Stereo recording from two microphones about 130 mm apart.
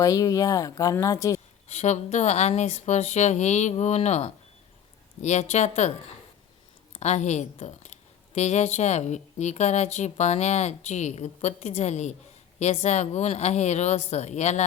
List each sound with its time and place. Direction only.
0.0 s speech: 25° left (ahead or behind)
1.6 s a woman's voice: 60° left (ahead or behind)
6.9 s a woman's voice: 60° left (ahead or behind)